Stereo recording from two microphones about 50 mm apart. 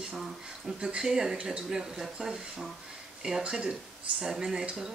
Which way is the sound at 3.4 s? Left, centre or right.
Centre.